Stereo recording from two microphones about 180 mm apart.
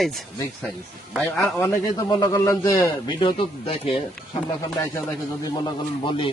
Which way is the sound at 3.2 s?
30° left (ahead or behind).